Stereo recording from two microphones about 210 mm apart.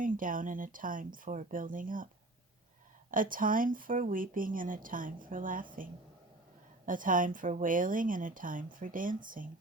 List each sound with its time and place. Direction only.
0.0 s speech: 40° right (ahead or behind)
3.1 s speech: 40° right (ahead or behind)